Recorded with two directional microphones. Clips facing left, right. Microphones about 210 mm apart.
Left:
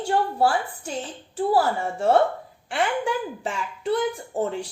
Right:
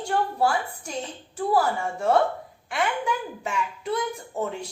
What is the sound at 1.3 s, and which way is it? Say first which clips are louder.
A woman's voice: left 2 dB; 30° left (ahead or behind).